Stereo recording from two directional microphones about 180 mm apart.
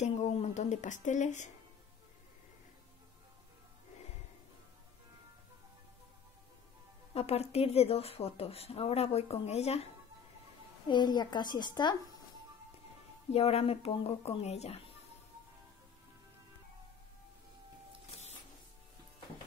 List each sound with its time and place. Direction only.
0.0 s speech: 35° left (ahead or behind)
7.2 s speech: 35° left (ahead or behind)
10.9 s speech: 25° left (ahead or behind)
13.3 s speech: 35° left (ahead or behind)